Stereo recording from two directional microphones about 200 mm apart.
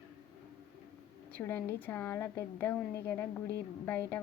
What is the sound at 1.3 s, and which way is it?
A woman's voice, 10° left (ahead or behind).